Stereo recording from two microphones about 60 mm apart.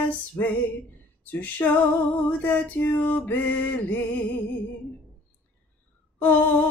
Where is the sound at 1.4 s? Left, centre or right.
Left.